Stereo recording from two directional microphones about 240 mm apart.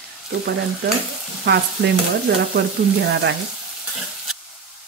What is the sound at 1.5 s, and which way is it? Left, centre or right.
Speech, right.